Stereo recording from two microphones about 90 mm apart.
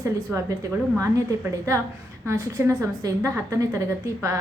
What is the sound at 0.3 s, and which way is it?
Speech, 20° right (ahead or behind).